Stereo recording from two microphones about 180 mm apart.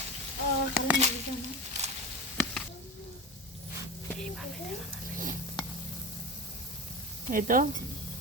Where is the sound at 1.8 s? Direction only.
35° right (ahead or behind).